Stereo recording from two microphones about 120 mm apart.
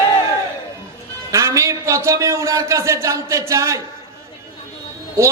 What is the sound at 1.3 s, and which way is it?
A man's voice, 25° right (ahead or behind).